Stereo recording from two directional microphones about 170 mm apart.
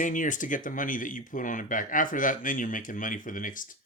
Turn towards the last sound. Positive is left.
turn(degrees=50)  # may be behind; listen again after turning